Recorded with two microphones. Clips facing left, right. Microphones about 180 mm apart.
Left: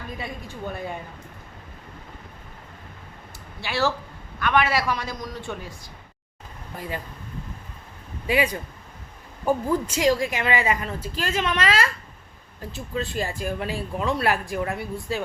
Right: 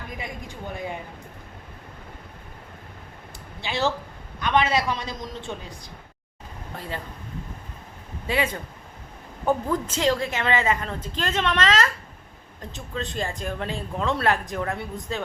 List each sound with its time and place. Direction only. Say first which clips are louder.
0.2 s speech: left 2 dB; 15° right (ahead or behind)
3.6 s a man's voice: left 1 dB; 20° right (ahead or behind)
8.3 s a woman's voice: left 3 dB; 15° left (ahead or behind)